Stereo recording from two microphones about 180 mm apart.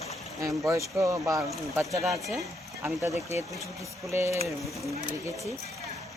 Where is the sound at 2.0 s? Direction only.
Centre (ahead or behind).